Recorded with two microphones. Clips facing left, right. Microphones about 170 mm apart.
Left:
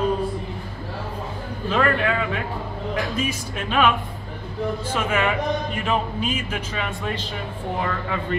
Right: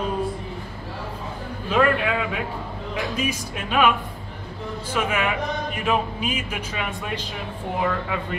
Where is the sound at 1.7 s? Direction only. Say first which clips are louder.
Right 1 dB; 5° right (ahead or behind).